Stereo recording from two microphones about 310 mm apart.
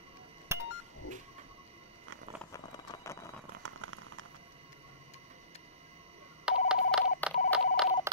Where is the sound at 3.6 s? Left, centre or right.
Right.